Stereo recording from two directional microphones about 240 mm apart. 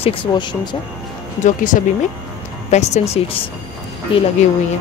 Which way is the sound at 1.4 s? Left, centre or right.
Left.